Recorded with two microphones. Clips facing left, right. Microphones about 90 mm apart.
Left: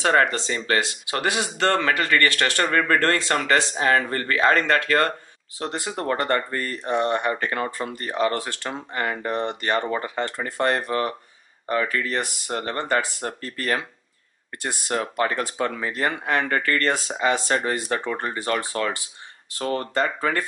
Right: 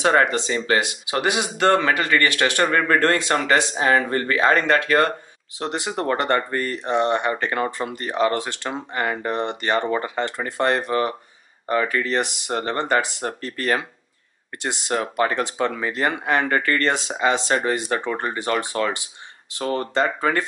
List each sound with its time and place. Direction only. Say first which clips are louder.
0.0 s speech: right 2 dB; 15° right (ahead or behind)